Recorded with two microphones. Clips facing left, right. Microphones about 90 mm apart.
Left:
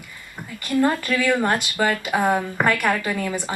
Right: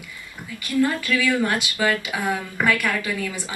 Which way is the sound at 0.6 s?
50° left (ahead or behind).